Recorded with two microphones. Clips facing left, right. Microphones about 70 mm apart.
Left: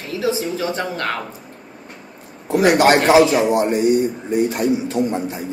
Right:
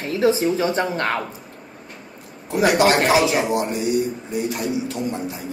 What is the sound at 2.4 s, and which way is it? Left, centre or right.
A man's voice, left.